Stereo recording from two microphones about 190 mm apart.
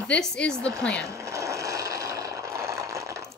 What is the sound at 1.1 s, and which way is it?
Vehicle, 15° right (ahead or behind).